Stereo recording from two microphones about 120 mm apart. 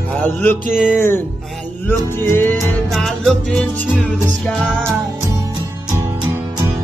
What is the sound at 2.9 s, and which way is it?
Music, centre (ahead or behind).